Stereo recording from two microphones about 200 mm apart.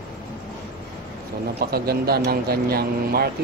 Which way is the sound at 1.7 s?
50° right (ahead or behind).